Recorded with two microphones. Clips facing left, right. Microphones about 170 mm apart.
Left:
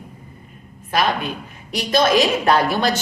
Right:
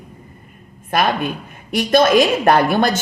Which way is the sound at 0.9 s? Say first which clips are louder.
Right 2 dB; 50° right (ahead or behind).